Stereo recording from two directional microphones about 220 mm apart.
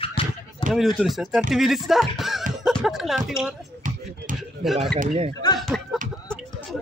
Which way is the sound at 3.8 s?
35° right (ahead or behind).